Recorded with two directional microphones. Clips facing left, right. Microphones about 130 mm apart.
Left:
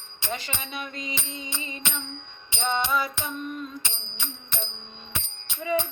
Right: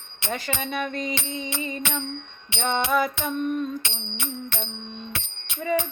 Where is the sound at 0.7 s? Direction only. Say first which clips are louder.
Right 8 dB; 50° right (ahead or behind).